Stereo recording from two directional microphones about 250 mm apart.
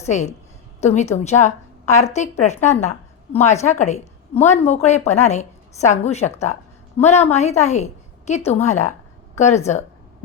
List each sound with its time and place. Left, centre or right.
0.0 s a woman's voice: left